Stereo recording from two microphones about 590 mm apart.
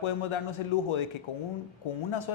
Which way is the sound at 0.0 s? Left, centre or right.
Left.